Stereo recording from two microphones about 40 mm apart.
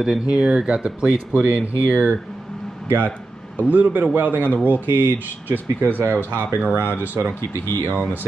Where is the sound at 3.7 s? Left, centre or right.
Right.